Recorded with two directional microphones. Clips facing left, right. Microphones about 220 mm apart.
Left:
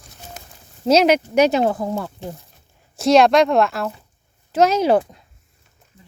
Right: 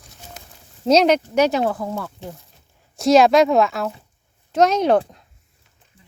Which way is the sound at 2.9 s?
Centre (ahead or behind).